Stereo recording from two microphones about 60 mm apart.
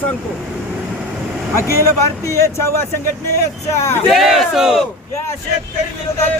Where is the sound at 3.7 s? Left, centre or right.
Left.